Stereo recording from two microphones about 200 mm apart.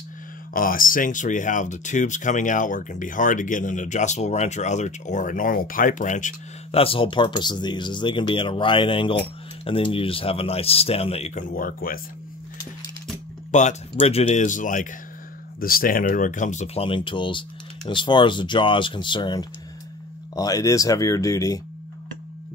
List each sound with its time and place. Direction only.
0.5 s speech: 45° left (ahead or behind)
13.5 s speech: 35° left (ahead or behind); by 21.5 s 15° left (ahead or behind)